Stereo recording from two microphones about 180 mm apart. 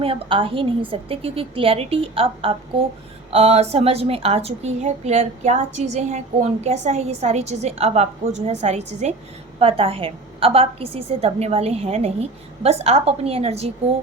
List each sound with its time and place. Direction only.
0.0 s a woman's voice: 30° right (ahead or behind)